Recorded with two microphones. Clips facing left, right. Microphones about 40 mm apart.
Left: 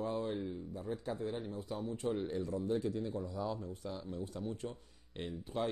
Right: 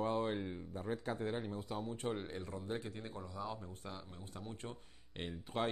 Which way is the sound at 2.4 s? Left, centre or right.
Right.